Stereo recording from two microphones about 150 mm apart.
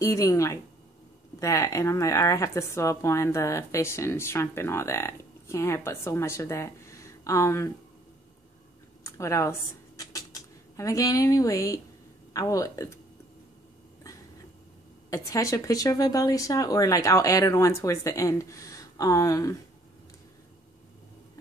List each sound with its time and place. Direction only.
0.0 s a woman's voice: 20° left (ahead or behind)
9.0 s a woman's voice: 20° left (ahead or behind)
15.0 s a woman's voice: 20° left (ahead or behind)